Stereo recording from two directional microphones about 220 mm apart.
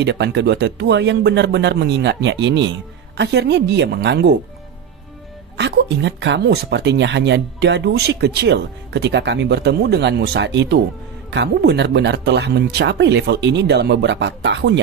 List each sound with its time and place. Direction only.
0.0 s speech: 50° right (ahead or behind)
5.6 s speech: 55° right (ahead or behind)